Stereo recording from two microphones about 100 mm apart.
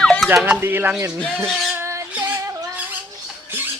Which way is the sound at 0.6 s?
20° right (ahead or behind).